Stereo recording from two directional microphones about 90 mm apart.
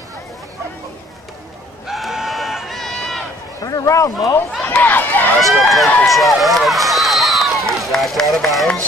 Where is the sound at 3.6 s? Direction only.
40° left (ahead or behind).